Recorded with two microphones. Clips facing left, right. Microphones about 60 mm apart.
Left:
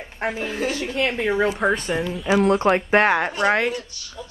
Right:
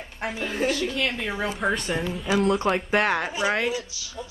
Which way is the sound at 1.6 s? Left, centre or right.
Centre.